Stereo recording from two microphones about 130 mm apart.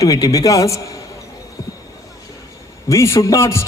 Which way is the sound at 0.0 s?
25° left (ahead or behind).